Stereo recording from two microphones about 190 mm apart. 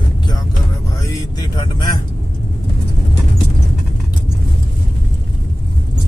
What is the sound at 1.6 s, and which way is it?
Speech, 20° left (ahead or behind).